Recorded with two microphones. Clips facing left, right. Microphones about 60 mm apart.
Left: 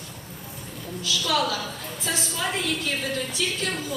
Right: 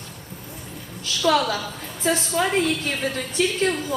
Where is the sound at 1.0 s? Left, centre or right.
Right.